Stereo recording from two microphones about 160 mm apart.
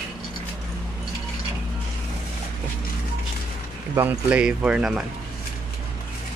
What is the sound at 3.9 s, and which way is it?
Speech, 10° right (ahead or behind).